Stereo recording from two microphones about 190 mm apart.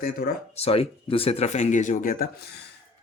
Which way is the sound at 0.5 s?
30° left (ahead or behind).